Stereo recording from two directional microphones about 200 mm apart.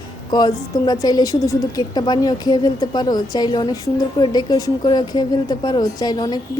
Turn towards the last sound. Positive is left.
turn(degrees=20)  # may be behind; listen again after turning